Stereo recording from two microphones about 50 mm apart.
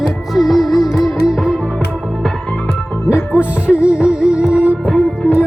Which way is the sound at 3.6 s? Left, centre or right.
Right.